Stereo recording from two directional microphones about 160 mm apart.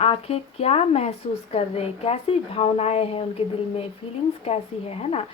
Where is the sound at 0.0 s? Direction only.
40° left (ahead or behind).